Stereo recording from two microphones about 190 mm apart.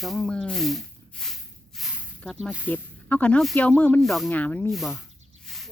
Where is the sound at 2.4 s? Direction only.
5° right (ahead or behind).